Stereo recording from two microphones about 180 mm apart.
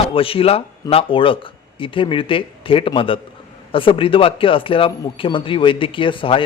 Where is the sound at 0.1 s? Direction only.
30° left (ahead or behind).